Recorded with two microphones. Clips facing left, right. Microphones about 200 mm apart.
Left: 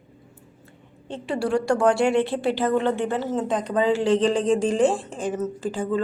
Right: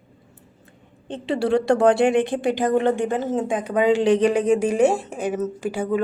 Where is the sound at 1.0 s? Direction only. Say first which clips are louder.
Right 3 dB; 20° right (ahead or behind).